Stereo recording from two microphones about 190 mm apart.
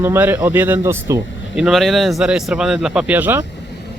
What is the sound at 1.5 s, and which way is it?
Speech, centre (ahead or behind).